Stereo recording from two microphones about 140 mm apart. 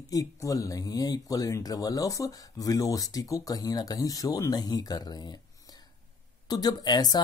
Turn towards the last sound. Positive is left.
turn(degrees=30)  # may be behind; listen again after turning